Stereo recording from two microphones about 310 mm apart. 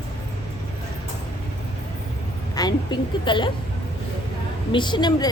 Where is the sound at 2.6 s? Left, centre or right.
Centre.